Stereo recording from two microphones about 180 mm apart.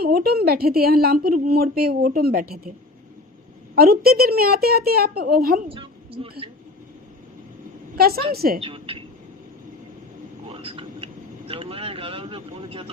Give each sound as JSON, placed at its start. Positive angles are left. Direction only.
{"t": 0.0, "sound": "a woman's voice", "side_deg": -60}
{"t": 3.8, "sound": "a woman's voice", "side_deg": -60}
{"t": 5.6, "sound": "a woman's voice", "side_deg": -30}
{"t": 7.9, "sound": "a woman's voice", "side_deg": -55}
{"t": 8.6, "sound": "a woman's voice", "side_deg": -30}
{"t": 10.5, "sound": "speech", "side_deg": -30}